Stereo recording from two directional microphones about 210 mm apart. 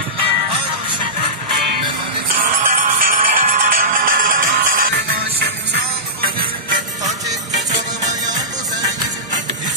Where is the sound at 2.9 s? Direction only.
40° right (ahead or behind).